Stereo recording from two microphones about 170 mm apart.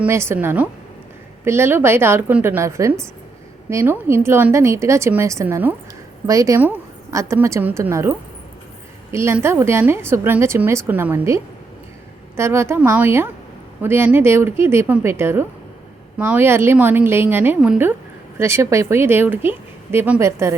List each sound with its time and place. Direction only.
0.0 s a woman's voice: 15° right (ahead or behind)
9.1 s a woman's voice: 15° right (ahead or behind)
12.4 s a woman's voice: 15° right (ahead or behind)